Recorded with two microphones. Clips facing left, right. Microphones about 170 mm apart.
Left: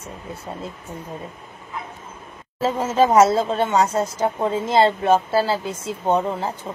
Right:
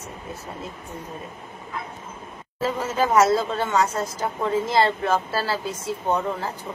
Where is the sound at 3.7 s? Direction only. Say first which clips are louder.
Left 3 dB; 30° left (ahead or behind); by 5.6 s 15° left (ahead or behind).